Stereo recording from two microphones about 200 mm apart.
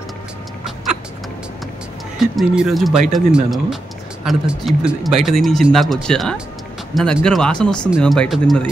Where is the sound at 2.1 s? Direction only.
5° right (ahead or behind).